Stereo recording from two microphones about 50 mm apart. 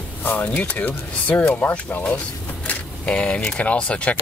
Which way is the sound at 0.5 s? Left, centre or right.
Left.